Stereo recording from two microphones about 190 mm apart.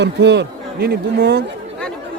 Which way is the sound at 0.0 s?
65° right (ahead or behind).